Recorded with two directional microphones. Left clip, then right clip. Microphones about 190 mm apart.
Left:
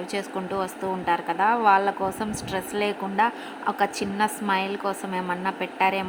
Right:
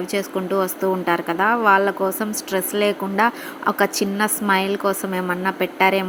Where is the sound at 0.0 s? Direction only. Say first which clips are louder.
Right 6 dB; 10° right (ahead or behind).